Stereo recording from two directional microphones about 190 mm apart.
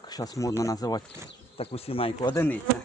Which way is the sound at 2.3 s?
10° left (ahead or behind).